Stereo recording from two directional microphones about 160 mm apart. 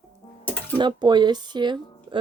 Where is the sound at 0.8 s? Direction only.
30° right (ahead or behind).